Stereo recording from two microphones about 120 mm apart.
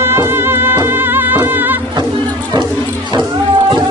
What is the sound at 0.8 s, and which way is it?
Music of bollywood, 15° right (ahead or behind).